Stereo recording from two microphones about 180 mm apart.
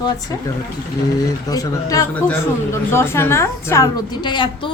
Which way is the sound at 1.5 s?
20° left (ahead or behind).